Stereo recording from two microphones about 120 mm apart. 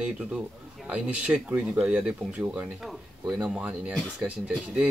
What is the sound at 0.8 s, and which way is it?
Speech, 10° right (ahead or behind).